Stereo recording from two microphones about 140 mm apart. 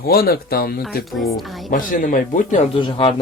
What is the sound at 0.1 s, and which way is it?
Speech, 90° left.